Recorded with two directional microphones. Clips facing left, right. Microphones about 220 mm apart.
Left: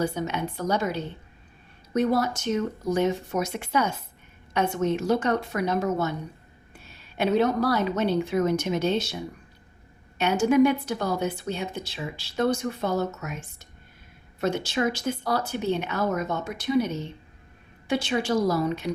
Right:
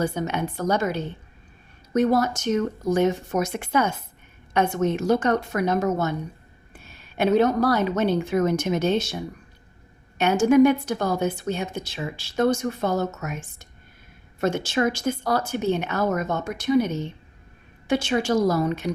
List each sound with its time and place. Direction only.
0.0 s a woman's voice: 50° right (ahead or behind)
7.2 s a woman's voice: 45° right (ahead or behind)
10.2 s a woman's voice: 50° right (ahead or behind)